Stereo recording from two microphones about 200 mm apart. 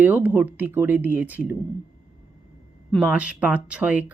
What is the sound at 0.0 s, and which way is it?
Speech, 10° right (ahead or behind).